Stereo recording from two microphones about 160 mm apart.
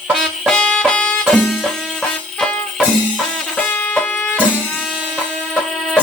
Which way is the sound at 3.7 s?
10° left (ahead or behind).